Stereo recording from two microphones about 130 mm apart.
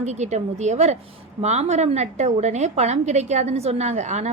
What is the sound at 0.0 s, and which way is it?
A woman's voice, 60° right (ahead or behind).